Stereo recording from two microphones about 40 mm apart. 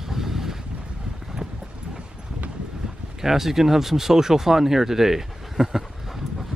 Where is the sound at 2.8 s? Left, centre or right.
Centre.